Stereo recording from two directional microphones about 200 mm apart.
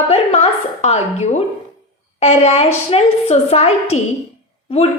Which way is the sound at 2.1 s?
35° left (ahead or behind).